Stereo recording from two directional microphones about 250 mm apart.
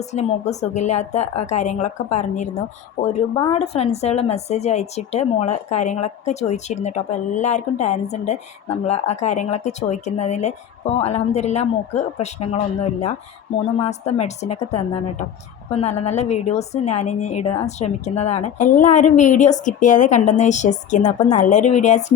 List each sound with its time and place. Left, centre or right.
0.0 s speech: left